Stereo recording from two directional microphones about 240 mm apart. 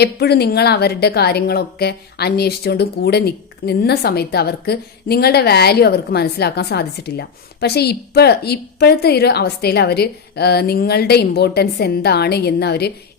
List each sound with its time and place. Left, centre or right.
0.0 s a woman's voice: left